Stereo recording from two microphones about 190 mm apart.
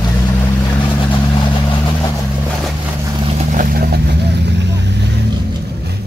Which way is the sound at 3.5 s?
45° right (ahead or behind).